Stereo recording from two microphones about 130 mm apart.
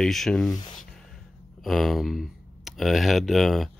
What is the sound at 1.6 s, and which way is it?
Speech, centre (ahead or behind).